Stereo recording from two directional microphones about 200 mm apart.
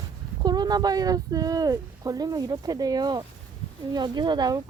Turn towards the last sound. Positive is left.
turn(degrees=-20)  # may be behind; listen again after turning